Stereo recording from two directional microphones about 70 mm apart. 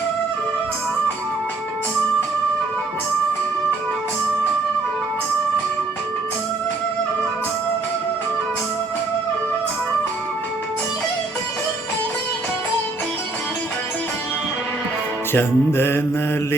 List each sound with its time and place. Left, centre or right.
15.3 s music: left